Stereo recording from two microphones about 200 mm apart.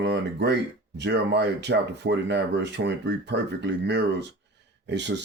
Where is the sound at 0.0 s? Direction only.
60° right (ahead or behind).